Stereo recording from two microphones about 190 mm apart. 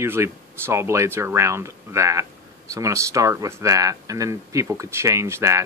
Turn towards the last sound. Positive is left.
turn(degrees=-15)  # may be behind; listen again after turning